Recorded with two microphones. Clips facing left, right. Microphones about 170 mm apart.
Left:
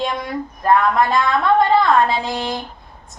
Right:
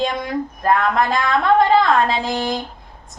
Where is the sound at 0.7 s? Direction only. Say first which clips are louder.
Left 3 dB; 50° right (ahead or behind).